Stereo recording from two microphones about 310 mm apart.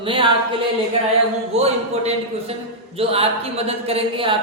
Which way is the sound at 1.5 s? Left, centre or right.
Centre.